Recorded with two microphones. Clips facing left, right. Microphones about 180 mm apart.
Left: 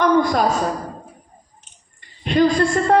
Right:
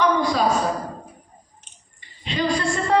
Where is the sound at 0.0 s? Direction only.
50° left (ahead or behind).